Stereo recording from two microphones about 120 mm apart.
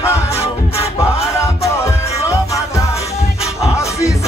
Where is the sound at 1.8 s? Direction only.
25° left (ahead or behind).